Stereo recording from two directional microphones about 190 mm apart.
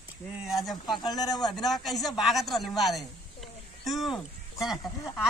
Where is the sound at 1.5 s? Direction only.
Centre (ahead or behind).